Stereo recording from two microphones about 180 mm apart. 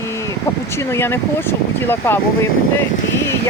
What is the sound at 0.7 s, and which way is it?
Speech, 15° left (ahead or behind).